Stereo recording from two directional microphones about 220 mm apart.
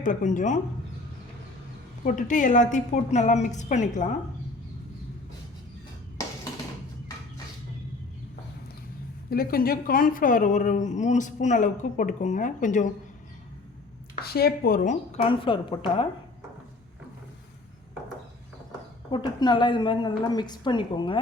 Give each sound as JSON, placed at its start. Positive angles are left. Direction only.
{"t": 0.0, "sound": "a woman's voice", "side_deg": 35}
{"t": 2.0, "sound": "a woman's voice", "side_deg": 35}
{"t": 9.3, "sound": "a woman's voice", "side_deg": 45}
{"t": 14.2, "sound": "a woman's voice", "side_deg": 45}
{"t": 19.1, "sound": "a woman's voice", "side_deg": 20}